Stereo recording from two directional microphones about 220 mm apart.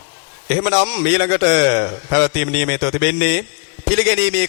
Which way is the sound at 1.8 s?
20° left (ahead or behind).